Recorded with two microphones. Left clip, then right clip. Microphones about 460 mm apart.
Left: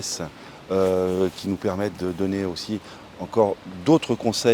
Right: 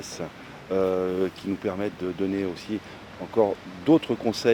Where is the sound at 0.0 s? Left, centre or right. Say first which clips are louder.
Left 4 dB; left.